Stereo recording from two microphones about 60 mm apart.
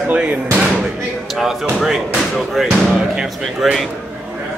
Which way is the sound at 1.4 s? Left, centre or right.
Centre.